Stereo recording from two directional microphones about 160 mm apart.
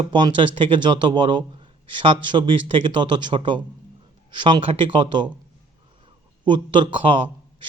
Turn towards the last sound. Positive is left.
turn(degrees=-30)  # may be behind; listen again after turning